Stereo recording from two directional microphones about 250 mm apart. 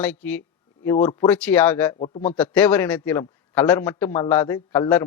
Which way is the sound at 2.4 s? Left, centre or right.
Centre.